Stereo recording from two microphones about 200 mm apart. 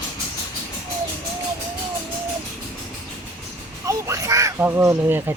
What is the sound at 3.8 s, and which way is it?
Crow, 15° right (ahead or behind).